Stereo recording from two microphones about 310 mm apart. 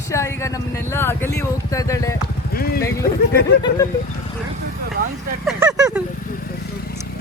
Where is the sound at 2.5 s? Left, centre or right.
Left.